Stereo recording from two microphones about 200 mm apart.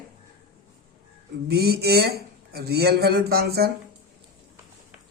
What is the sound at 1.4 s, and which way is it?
Speech, 55° right (ahead or behind).